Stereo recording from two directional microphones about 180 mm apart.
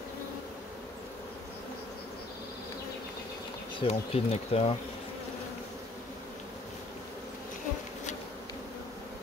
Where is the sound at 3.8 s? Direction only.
35° left (ahead or behind).